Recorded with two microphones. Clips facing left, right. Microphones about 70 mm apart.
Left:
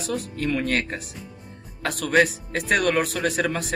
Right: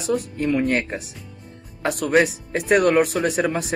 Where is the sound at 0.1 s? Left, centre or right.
Centre.